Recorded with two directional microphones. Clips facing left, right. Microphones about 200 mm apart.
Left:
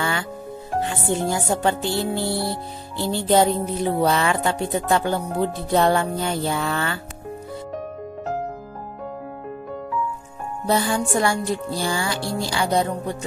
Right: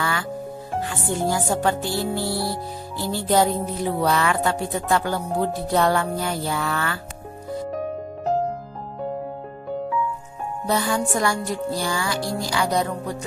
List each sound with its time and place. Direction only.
0.0 s music: 25° left (ahead or behind)
2.2 s music: 5° right (ahead or behind)
3.0 s music: 25° left (ahead or behind)
10.7 s music: 30° left (ahead or behind)